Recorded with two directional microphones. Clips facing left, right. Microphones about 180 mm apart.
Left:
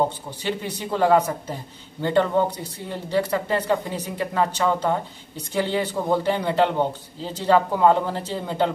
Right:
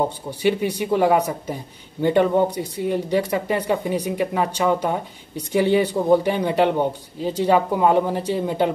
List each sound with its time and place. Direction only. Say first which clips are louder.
0.4 s speech: right 8 dB; 10° right (ahead or behind)